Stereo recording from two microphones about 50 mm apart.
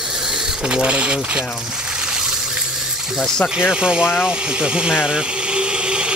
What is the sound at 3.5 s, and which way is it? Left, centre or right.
Speech, centre.